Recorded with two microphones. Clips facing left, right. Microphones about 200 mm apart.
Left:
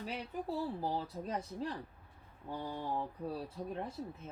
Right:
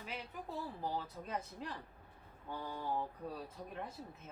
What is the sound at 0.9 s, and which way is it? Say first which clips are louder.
Speech: left 4 dB; 35° left (ahead or behind).